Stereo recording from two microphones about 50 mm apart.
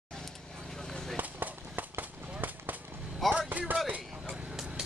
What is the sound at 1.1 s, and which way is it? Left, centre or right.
Run, right.